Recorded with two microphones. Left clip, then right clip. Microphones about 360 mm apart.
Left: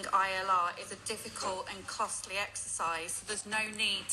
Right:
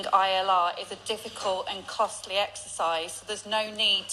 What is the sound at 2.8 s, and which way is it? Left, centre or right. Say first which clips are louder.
Speech: right 7 dB; centre.